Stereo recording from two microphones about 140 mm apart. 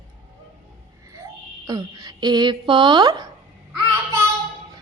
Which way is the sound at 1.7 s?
30° right (ahead or behind).